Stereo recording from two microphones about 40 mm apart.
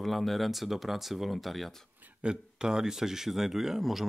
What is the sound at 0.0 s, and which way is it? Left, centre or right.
Speech, centre.